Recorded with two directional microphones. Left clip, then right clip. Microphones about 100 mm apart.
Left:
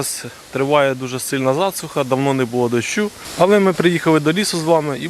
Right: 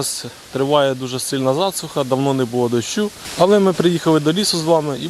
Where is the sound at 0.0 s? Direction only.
Centre (ahead or behind).